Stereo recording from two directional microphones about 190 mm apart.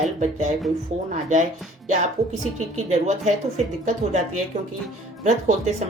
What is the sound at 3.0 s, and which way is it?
Speech, 35° right (ahead or behind).